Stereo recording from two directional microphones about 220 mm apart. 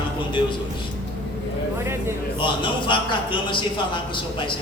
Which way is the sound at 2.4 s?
20° left (ahead or behind).